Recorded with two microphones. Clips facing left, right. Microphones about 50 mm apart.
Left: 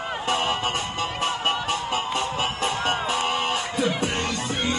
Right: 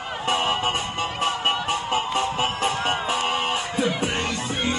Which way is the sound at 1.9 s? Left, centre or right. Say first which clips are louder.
Right 2 dB; right.